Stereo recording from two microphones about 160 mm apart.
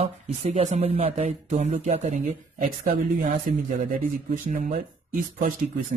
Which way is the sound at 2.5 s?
60° right (ahead or behind).